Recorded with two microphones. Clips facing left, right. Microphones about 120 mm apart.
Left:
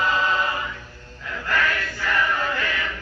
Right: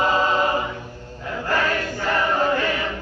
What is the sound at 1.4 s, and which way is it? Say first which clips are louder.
Chant: right 2 dB; 30° right (ahead or behind).